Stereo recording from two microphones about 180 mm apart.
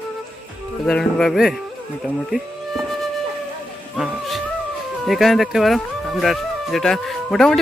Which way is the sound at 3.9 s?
Centre (ahead or behind).